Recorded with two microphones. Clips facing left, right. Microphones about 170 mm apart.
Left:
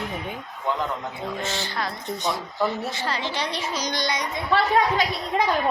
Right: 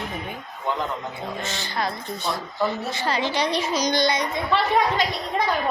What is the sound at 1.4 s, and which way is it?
Speech, 15° right (ahead or behind).